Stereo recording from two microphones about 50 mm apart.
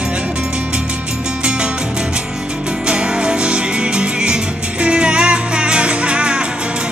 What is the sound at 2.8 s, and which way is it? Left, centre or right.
Music, right.